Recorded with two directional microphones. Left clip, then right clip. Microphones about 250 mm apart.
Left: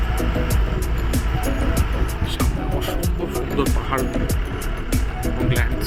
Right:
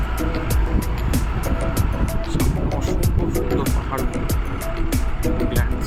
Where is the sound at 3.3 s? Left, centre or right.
Centre.